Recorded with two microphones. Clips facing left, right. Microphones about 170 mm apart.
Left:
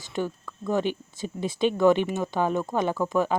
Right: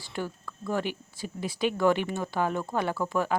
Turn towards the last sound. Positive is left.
turn(degrees=20)  # may be behind; listen again after turning